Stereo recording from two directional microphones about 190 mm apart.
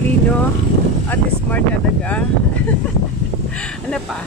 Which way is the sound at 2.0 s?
5° left (ahead or behind).